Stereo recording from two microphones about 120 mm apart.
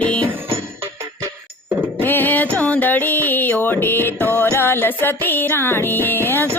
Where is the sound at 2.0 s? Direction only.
15° left (ahead or behind).